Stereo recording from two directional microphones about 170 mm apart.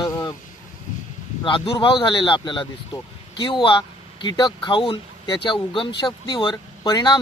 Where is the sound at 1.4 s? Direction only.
30° left (ahead or behind).